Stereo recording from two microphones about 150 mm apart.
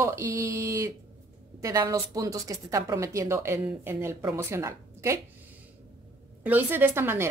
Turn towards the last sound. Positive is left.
turn(degrees=-15)  # may be behind; listen again after turning